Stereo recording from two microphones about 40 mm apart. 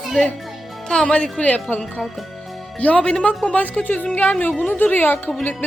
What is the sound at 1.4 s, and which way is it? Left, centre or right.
Speech, left.